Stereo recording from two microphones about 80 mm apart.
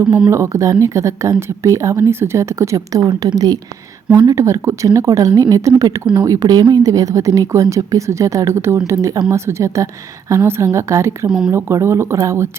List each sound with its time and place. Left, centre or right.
0.3 s speech: right
3.1 s speech: right
4.4 s speech: right
11.3 s speech: centre
11.5 s speech: right